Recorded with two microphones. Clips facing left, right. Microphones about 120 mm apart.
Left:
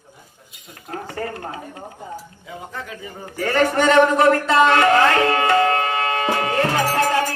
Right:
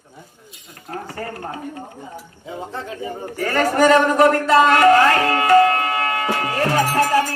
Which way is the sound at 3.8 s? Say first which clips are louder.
Right 2 dB; 25° left (ahead or behind).